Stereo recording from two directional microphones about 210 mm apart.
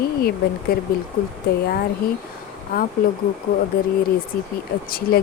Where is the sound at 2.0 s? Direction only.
45° left (ahead or behind).